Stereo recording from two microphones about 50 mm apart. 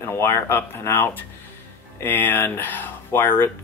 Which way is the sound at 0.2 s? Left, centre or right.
Left.